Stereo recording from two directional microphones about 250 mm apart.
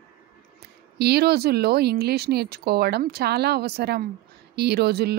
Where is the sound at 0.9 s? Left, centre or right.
Right.